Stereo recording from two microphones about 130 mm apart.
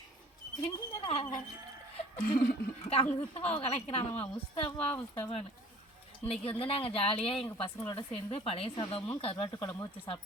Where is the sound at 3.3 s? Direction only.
50° left (ahead or behind).